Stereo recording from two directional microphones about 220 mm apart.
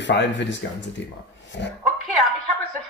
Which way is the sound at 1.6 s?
50° left (ahead or behind).